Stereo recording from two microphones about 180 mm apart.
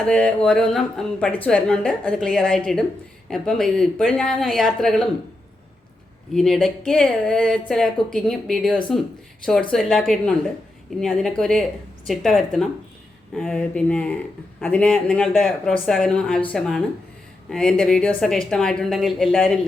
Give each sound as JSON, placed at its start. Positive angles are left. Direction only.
{"t": 0.0, "sound": "speech", "side_deg": 5}
{"t": 6.3, "sound": "speech", "side_deg": 0}